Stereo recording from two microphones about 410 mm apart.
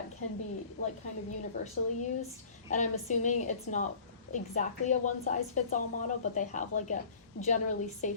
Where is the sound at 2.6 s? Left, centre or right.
Centre.